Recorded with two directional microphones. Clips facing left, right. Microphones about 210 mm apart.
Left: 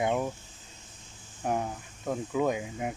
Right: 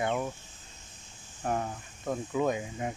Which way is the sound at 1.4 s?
10° left (ahead or behind).